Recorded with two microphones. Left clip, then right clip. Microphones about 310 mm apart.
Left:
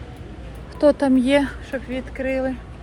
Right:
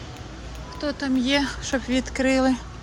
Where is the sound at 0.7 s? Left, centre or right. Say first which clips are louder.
Left 10 dB; centre.